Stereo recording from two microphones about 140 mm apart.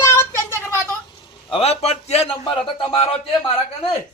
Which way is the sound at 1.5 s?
50° left (ahead or behind).